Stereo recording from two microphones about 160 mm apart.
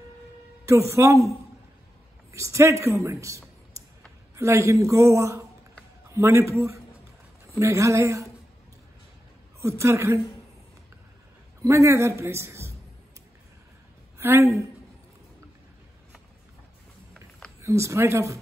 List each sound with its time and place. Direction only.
0.7 s a man's voice: 20° right (ahead or behind)
2.3 s a man's voice: 20° right (ahead or behind)
4.4 s a man's voice: 20° right (ahead or behind)
9.6 s a man's voice: 20° right (ahead or behind)
11.6 s a man's voice: 20° right (ahead or behind)
14.1 s a woman's voice: 15° right (ahead or behind)
17.6 s a man's voice: 20° right (ahead or behind)